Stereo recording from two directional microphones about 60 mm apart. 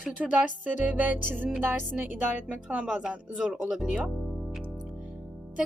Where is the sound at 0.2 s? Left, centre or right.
Right.